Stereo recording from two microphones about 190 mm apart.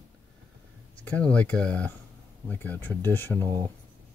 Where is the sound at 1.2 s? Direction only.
5° left (ahead or behind).